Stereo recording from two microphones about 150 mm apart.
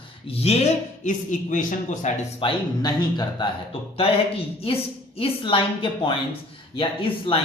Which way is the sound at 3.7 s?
40° left (ahead or behind).